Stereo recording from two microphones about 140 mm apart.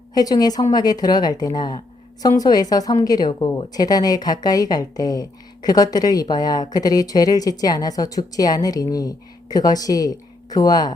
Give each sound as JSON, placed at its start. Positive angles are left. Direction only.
{"t": 0.1, "sound": "a woman's voice", "side_deg": 30}